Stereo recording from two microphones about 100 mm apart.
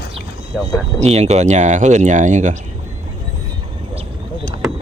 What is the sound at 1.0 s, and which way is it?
Speech, 90° right.